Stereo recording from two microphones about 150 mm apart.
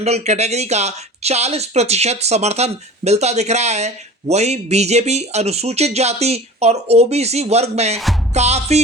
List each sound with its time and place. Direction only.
0.0 s speech: 45° right (ahead or behind)